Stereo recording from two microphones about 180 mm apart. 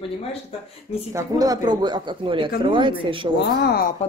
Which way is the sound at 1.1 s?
20° right (ahead or behind).